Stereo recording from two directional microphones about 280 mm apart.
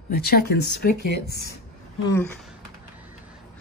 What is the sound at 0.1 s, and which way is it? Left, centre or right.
Speech, left.